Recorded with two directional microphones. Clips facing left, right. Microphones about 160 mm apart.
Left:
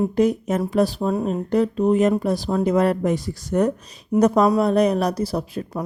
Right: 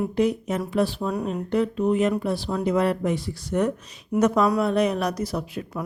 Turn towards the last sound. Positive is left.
turn(degrees=35)  # may be behind; listen again after turning